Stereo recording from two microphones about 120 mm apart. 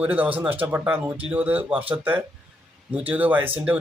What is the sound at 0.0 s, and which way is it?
Speech, 15° right (ahead or behind).